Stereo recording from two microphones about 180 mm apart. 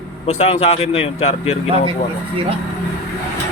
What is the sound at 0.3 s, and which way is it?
Speech, 35° left (ahead or behind).